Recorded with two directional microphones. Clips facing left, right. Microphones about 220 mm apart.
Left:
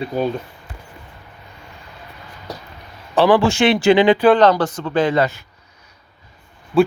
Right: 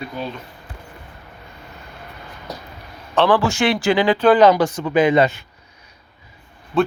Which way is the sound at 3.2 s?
10° left (ahead or behind).